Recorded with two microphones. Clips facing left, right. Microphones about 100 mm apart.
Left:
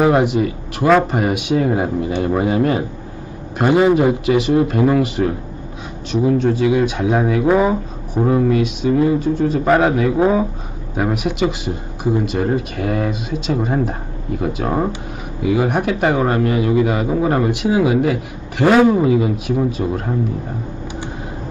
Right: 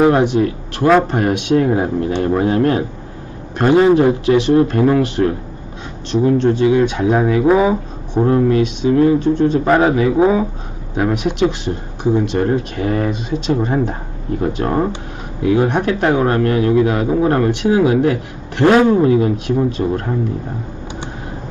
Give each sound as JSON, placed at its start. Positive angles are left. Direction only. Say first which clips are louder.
{"t": 0.0, "sound": "speech", "louder": "right 2 dB", "side_deg": 5}